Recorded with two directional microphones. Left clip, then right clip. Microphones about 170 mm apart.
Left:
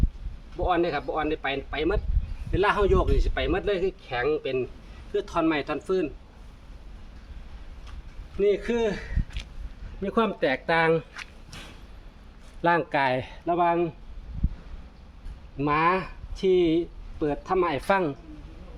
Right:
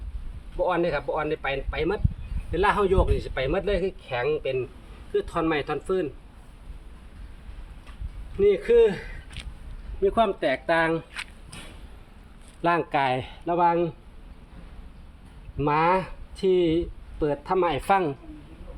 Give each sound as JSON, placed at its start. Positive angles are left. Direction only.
{"t": 0.5, "sound": "speech", "side_deg": 15}
{"t": 5.1, "sound": "speech", "side_deg": 25}
{"t": 8.4, "sound": "speech", "side_deg": 25}
{"t": 10.0, "sound": "speech", "side_deg": 40}
{"t": 12.6, "sound": "speech", "side_deg": 10}
{"t": 15.5, "sound": "speech", "side_deg": 5}